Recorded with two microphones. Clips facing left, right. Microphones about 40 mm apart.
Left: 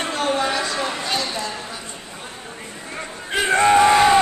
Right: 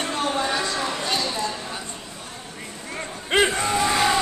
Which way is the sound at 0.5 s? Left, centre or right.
Left.